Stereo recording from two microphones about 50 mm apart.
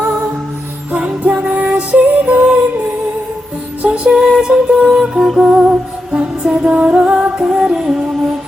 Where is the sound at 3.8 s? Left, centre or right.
Right.